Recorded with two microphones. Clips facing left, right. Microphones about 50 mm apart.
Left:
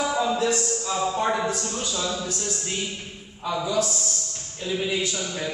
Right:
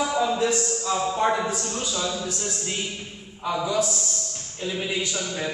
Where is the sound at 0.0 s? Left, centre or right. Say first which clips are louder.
Even; centre.